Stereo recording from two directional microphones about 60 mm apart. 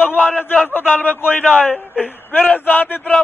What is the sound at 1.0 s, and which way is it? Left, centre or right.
Speech, left.